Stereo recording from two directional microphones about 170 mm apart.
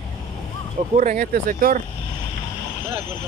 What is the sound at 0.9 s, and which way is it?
Speech, 55° right (ahead or behind).